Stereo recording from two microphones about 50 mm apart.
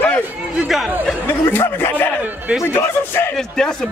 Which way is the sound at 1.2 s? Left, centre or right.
Left.